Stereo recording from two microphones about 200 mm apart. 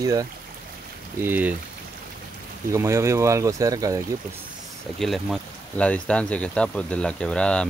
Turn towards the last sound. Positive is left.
turn(degrees=5)  # may be behind; listen again after turning